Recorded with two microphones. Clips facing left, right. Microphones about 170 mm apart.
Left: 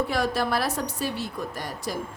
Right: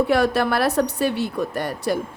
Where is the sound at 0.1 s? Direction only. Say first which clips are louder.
Right 6 dB; 65° right (ahead or behind).